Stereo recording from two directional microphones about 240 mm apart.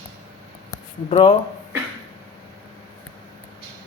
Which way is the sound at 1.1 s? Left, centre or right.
Left.